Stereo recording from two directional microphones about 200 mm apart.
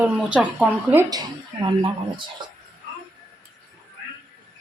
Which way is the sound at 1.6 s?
25° right (ahead or behind).